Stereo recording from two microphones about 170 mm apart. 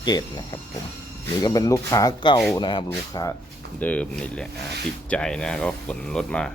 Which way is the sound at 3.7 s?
10° left (ahead or behind).